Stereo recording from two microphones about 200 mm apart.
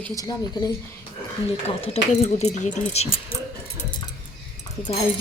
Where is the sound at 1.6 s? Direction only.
30° left (ahead or behind).